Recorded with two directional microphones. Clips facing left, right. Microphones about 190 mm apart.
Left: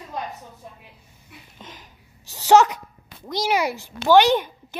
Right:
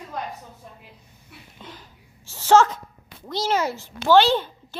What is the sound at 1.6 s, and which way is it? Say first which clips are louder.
A child's voice: right 2 dB; 20° left (ahead or behind).